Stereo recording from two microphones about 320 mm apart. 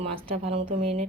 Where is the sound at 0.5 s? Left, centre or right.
Right.